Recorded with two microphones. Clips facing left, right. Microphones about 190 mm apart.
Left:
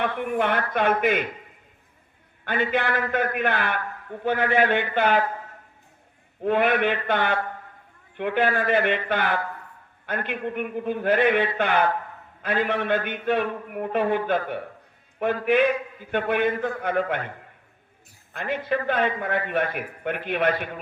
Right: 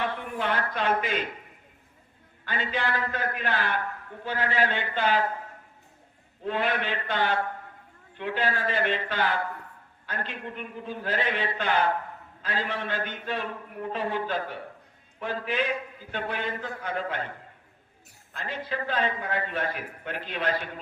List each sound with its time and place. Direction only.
0.0 s a man's voice: 60° left (ahead or behind)
2.4 s a man's voice: 55° left (ahead or behind)
6.4 s a man's voice: 60° left (ahead or behind)
18.3 s a man's voice: 60° left (ahead or behind)